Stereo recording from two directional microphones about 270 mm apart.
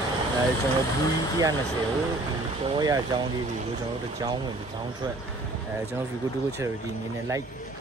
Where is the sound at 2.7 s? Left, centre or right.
Centre.